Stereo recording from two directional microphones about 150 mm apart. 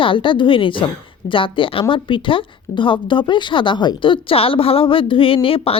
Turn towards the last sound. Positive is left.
turn(degrees=35)  # may be behind; listen again after turning